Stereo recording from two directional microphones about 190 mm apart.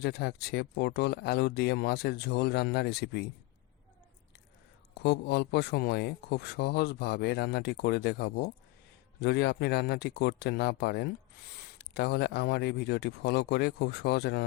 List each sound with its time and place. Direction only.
0.0 s speech: 60° left (ahead or behind)
4.9 s speech: 60° left (ahead or behind)